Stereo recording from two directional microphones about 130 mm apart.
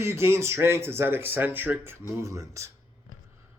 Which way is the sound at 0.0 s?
20° right (ahead or behind).